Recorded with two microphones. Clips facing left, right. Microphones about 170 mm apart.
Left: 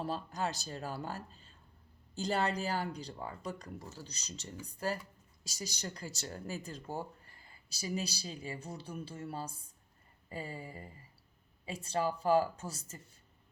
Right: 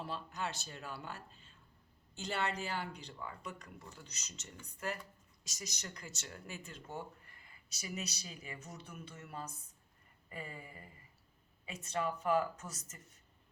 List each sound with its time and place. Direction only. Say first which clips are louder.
0.0 s speech: left 5 dB; 40° left (ahead or behind)